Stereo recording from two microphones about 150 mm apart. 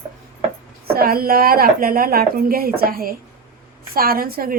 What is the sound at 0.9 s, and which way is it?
A woman's voice, 85° right.